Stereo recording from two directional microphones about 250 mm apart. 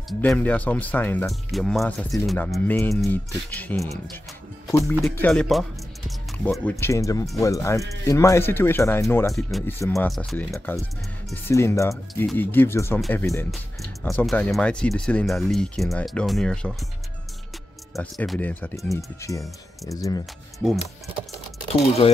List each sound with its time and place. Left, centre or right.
0.2 s speech: centre
9.8 s speech: centre
10.0 s speech: centre
17.9 s speech: centre
20.5 s speech: centre
22.0 s speech: left